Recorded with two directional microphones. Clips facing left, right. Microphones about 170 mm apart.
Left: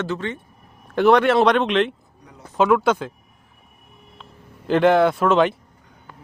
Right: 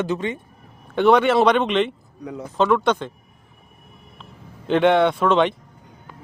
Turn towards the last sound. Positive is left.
turn(degrees=0)  # may be behind; listen again after turning